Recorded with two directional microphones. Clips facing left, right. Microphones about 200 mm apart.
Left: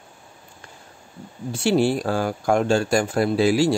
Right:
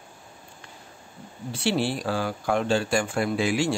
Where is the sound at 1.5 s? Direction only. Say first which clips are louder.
Left 6 dB; 45° left (ahead or behind).